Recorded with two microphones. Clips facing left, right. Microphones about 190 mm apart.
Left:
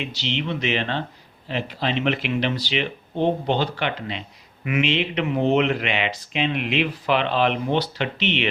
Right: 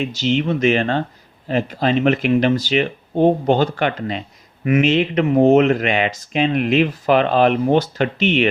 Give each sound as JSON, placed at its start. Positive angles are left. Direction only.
{"t": 0.0, "sound": "speech", "side_deg": -45}